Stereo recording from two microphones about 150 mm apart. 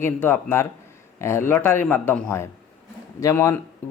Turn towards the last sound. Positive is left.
turn(degrees=20)  # may be behind; listen again after turning